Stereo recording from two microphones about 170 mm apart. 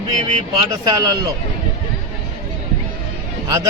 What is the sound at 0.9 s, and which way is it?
Speech, 20° right (ahead or behind).